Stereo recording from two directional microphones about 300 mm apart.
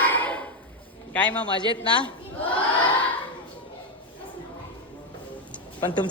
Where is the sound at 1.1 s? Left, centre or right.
Centre.